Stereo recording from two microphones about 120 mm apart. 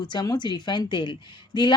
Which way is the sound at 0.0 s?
35° left (ahead or behind).